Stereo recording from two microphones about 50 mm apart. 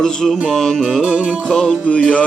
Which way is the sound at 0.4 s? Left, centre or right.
Centre.